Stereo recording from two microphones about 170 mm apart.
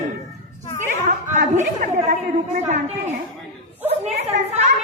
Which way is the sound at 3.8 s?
35° right (ahead or behind).